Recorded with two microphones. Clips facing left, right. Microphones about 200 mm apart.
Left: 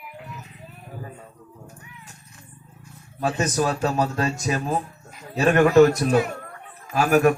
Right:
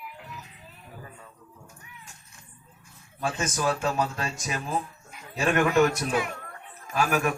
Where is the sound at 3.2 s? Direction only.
40° left (ahead or behind).